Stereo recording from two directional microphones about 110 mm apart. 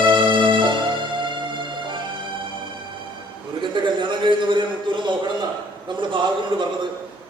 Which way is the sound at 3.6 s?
45° right (ahead or behind).